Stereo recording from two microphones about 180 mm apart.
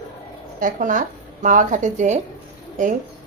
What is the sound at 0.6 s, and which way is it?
Speech, 45° right (ahead or behind).